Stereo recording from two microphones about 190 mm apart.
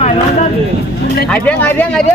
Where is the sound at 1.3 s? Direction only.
10° left (ahead or behind).